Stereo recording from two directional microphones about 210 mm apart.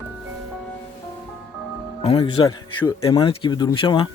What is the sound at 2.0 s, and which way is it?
Speech, 25° left (ahead or behind).